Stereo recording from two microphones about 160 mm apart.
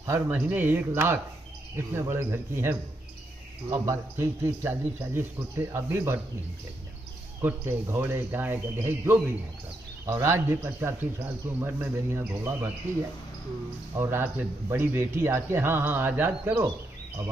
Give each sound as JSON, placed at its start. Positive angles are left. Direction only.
{"t": 0.0, "sound": "a man's voice", "side_deg": -15}
{"t": 7.4, "sound": "a man's voice", "side_deg": -15}
{"t": 13.9, "sound": "a man's voice", "side_deg": -15}